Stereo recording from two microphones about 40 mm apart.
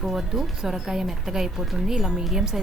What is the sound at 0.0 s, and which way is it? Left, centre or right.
Speech, centre.